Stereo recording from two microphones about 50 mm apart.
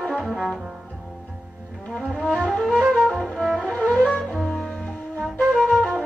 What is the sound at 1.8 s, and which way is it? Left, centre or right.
Music, left.